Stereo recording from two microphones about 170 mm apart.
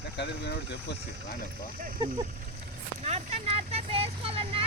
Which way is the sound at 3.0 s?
40° right (ahead or behind).